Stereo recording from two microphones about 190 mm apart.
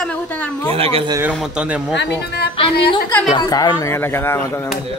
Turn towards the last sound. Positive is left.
turn(degrees=15)  # may be behind; listen again after turning